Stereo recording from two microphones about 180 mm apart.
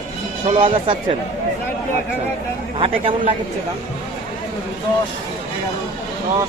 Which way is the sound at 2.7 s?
30° right (ahead or behind).